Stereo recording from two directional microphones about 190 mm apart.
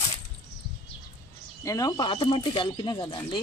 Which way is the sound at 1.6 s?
15° left (ahead or behind).